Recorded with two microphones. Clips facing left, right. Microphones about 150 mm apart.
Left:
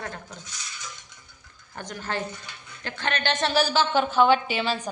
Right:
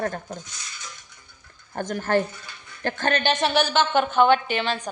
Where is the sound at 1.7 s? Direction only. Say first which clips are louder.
Right 9 dB; 50° right (ahead or behind).